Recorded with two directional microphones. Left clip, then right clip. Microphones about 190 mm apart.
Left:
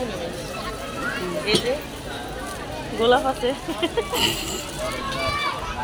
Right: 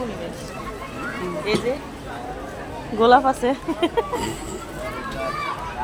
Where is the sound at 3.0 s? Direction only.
70° right (ahead or behind).